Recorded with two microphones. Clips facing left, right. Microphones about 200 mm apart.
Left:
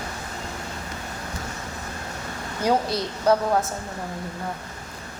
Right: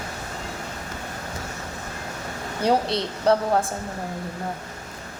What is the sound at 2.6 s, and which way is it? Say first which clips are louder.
A woman's voice: right 1 dB; 30° right (ahead or behind).